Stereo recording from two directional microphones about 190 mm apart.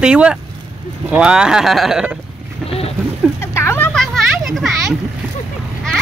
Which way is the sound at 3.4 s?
15° left (ahead or behind).